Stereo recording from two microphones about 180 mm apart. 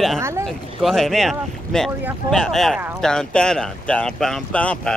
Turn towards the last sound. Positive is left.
turn(degrees=5)  # may be behind; listen again after turning